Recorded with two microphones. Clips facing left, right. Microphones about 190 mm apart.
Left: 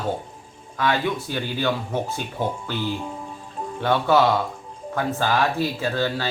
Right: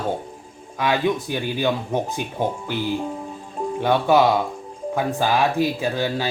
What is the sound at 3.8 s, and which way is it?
Speech, 15° right (ahead or behind).